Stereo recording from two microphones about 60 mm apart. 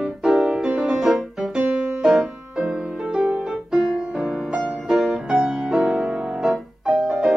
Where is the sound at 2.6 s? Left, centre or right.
Centre.